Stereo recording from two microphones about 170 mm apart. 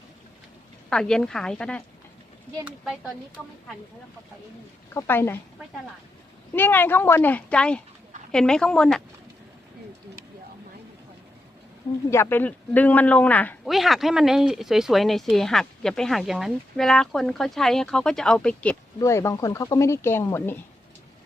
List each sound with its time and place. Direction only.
0.9 s speech: 5° left (ahead or behind)
2.6 s speech: 5° right (ahead or behind)
4.9 s speech: 15° left (ahead or behind)
6.5 s speech: 10° left (ahead or behind)
12.1 s speech: 15° left (ahead or behind)
13.7 s speech: centre (ahead or behind)